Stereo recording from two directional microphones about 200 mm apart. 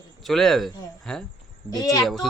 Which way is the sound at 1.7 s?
20° left (ahead or behind).